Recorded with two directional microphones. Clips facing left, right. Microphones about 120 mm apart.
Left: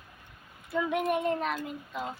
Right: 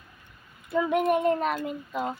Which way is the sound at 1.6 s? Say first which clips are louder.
Right 6 dB; 50° right (ahead or behind).